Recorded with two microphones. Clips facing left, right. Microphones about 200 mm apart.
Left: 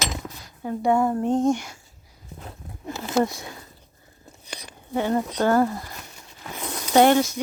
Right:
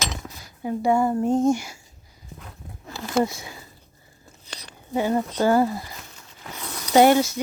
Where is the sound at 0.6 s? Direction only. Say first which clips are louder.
Even; 5° right (ahead or behind).